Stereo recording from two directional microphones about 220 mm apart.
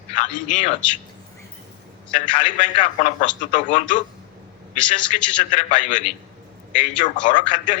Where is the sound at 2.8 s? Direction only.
35° left (ahead or behind).